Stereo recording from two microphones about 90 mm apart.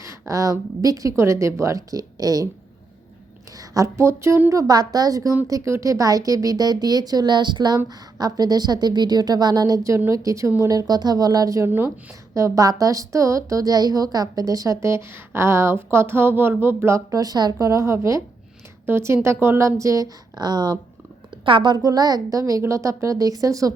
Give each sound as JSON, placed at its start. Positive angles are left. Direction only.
{"t": 0.0, "sound": "a woman's voice", "side_deg": -35}
{"t": 3.6, "sound": "a woman's voice", "side_deg": -40}
{"t": 21.4, "sound": "a woman's voice", "side_deg": -65}